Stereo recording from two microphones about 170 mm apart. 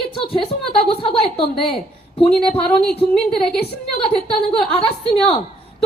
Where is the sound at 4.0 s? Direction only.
35° left (ahead or behind).